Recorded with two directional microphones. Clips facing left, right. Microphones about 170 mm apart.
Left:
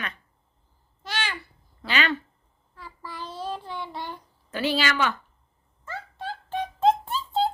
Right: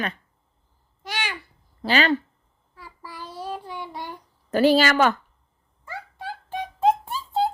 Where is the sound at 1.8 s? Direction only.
35° right (ahead or behind).